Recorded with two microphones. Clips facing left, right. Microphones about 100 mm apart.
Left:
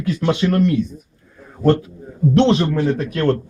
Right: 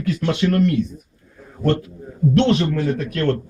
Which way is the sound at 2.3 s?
25° left (ahead or behind).